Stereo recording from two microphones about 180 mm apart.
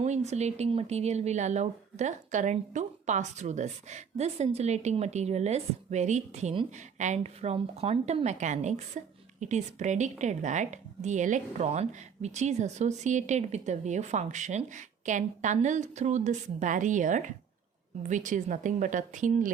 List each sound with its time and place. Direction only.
0.0 s a woman's voice: 40° right (ahead or behind)